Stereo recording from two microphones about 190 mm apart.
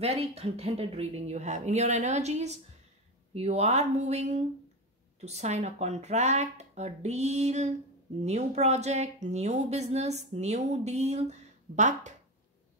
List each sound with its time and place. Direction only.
0.0 s speech: 35° right (ahead or behind)